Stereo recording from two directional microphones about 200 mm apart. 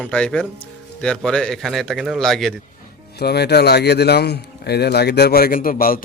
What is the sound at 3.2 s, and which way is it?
A man's voice, 55° left (ahead or behind).